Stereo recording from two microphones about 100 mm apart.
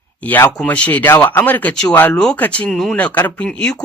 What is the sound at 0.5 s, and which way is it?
Speech, 10° left (ahead or behind).